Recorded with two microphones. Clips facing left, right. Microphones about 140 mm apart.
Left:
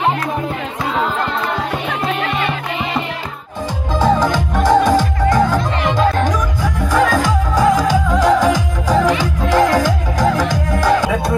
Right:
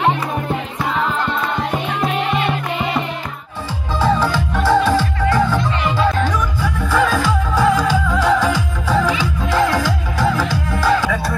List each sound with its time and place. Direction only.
4.0 s music: 15° left (ahead or behind)
6.6 s music: 15° left (ahead or behind)